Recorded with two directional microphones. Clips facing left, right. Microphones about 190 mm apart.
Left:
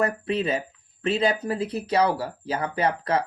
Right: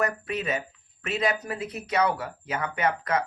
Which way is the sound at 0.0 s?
30° left (ahead or behind).